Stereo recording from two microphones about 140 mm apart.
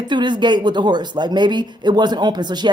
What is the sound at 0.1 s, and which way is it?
Speech, 35° right (ahead or behind).